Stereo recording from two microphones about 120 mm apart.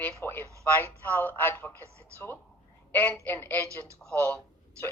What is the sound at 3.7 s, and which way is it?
Speech, 25° right (ahead or behind).